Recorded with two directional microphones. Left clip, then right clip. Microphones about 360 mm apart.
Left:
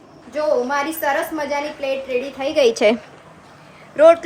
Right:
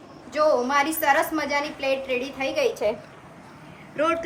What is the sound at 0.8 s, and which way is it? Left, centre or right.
Speech, centre.